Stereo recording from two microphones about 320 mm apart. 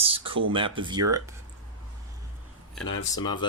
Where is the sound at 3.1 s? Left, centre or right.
Centre.